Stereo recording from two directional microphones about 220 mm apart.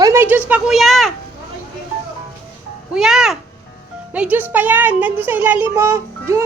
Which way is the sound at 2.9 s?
5° right (ahead or behind).